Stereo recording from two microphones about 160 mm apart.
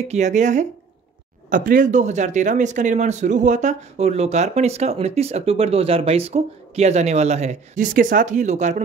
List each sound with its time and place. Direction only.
0.1 s speech: 50° right (ahead or behind)